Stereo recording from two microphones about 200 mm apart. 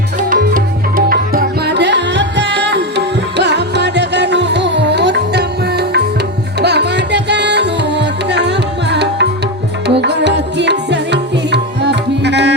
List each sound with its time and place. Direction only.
0.2 s music: 40° right (ahead or behind); by 12.5 s 60° right (ahead or behind)